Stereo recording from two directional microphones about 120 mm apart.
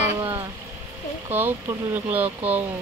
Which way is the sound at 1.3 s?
15° right (ahead or behind).